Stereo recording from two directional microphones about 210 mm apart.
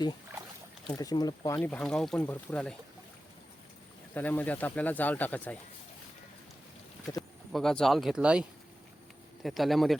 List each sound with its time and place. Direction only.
0.9 s speech: 20° left (ahead or behind)
4.1 s speech: 10° left (ahead or behind)
7.1 s speech: 15° left (ahead or behind)
7.5 s speech: centre (ahead or behind)